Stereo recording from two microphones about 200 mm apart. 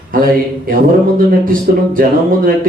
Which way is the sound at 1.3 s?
45° right (ahead or behind).